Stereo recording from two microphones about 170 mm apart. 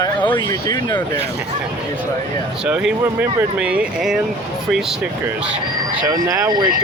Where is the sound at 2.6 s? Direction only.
5° right (ahead or behind).